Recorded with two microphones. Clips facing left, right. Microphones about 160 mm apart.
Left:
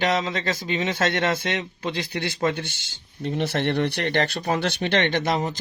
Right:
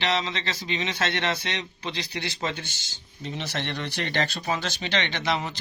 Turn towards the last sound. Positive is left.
turn(degrees=45)  # may be behind; listen again after turning